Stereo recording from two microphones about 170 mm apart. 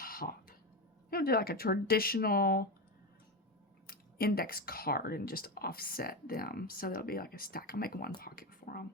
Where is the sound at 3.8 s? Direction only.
60° left (ahead or behind).